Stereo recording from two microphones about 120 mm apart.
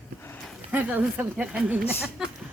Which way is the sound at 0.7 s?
10° right (ahead or behind).